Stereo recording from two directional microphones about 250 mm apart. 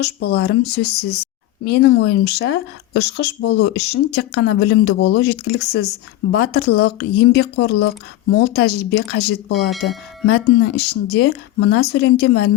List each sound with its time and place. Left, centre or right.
0.0 s speech: left
9.5 s speech: centre
10.2 s speech: left